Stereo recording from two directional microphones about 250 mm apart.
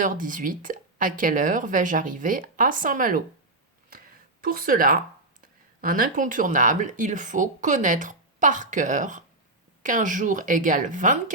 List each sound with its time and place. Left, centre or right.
0.0 s speech: right
3.8 s a sound: right
5.4 s speech: right